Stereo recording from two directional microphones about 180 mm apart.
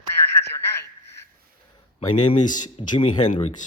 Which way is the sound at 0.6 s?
15° left (ahead or behind).